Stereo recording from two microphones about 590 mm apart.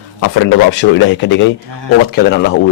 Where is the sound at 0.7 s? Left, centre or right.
Centre.